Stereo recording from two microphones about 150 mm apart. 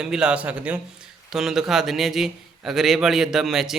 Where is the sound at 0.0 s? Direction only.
5° right (ahead or behind).